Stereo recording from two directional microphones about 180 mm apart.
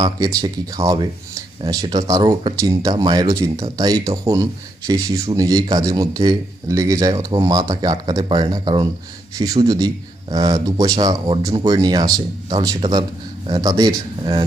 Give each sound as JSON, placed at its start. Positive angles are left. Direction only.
{"t": 0.0, "sound": "speech", "side_deg": -20}